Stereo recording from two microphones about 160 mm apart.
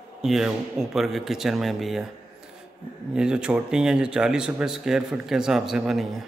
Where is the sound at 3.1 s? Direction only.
5° right (ahead or behind).